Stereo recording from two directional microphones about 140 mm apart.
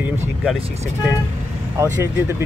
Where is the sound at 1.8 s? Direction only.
20° right (ahead or behind).